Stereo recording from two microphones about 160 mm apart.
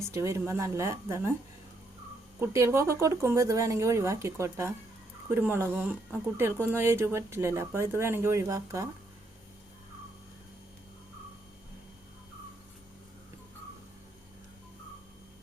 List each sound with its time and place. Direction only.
0.1 s speech: 20° right (ahead or behind)
2.4 s speech: 15° right (ahead or behind)